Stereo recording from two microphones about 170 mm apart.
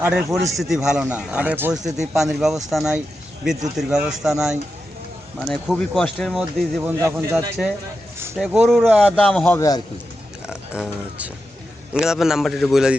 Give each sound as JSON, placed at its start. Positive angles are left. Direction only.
{"t": 0.0, "sound": "speech", "side_deg": -5}
{"t": 6.8, "sound": "speech", "side_deg": -15}
{"t": 8.4, "sound": "speech", "side_deg": 0}
{"t": 9.3, "sound": "a man's voice", "side_deg": 10}
{"t": 9.6, "sound": "a man's voice", "side_deg": 20}
{"t": 10.4, "sound": "speech", "side_deg": -5}